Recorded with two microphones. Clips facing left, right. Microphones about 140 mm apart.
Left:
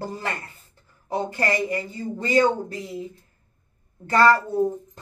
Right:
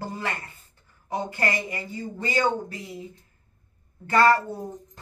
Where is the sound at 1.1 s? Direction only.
35° left (ahead or behind).